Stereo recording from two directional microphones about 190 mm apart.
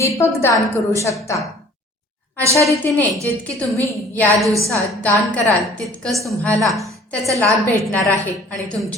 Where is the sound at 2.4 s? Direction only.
15° right (ahead or behind).